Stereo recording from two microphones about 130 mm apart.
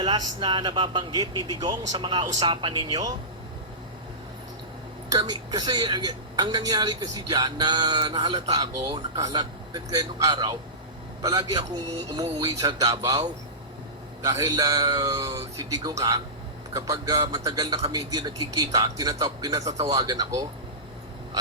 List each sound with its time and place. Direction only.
0.0 s speech: 35° right (ahead or behind)
5.1 s a man's voice: 35° right (ahead or behind)
14.2 s a man's voice: 25° right (ahead or behind)